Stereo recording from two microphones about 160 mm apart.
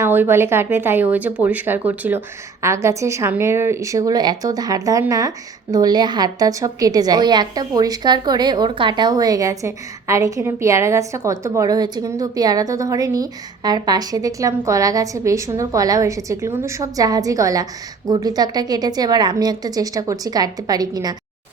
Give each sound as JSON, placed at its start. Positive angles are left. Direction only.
{"t": 0.0, "sound": "a woman's voice", "side_deg": -15}